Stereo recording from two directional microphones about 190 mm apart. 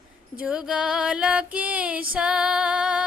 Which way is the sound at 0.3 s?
5° right (ahead or behind).